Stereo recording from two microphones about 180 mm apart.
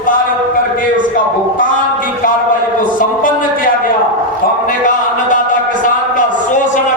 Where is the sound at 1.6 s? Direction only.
50° left (ahead or behind).